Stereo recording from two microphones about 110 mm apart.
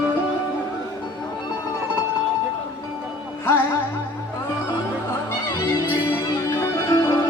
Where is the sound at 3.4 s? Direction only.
25° left (ahead or behind).